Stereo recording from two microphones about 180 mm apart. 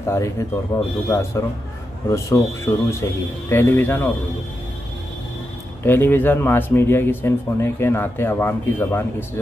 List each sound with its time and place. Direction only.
0.0 s speech: 15° left (ahead or behind)
5.9 s speech: 10° left (ahead or behind)